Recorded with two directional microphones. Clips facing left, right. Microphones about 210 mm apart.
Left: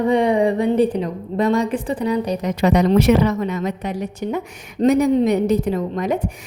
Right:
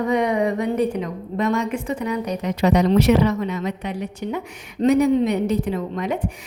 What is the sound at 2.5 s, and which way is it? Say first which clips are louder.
A woman's voice: left 1 dB; 50° left (ahead or behind).